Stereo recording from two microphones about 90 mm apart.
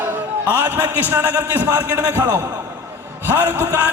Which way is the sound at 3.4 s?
35° right (ahead or behind).